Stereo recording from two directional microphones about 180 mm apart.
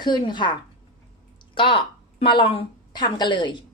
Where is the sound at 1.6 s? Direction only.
30° left (ahead or behind).